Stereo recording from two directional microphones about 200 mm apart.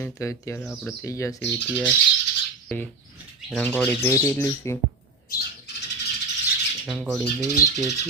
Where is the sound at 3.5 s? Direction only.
5° left (ahead or behind).